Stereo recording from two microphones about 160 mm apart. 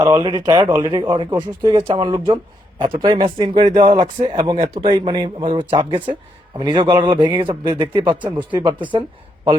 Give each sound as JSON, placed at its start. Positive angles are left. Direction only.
{"t": 0.0, "sound": "speech", "side_deg": -25}